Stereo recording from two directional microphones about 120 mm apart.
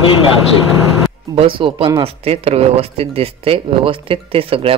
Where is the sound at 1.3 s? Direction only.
50° right (ahead or behind).